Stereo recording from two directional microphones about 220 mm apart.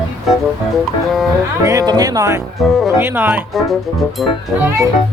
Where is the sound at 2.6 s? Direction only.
Centre (ahead or behind).